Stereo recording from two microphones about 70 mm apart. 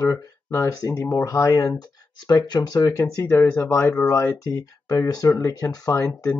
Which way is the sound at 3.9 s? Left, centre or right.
Left.